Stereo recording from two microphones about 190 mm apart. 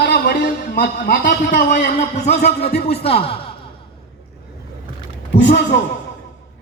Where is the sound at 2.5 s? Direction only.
55° left (ahead or behind).